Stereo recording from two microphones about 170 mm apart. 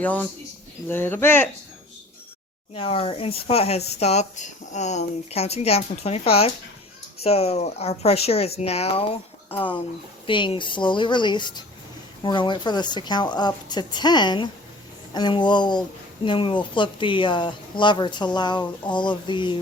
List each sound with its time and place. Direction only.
0.0 s speech: 10° left (ahead or behind)
2.7 s speech: 35° left (ahead or behind)